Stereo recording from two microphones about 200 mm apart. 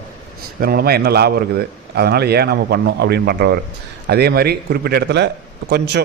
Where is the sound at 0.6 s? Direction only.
50° right (ahead or behind).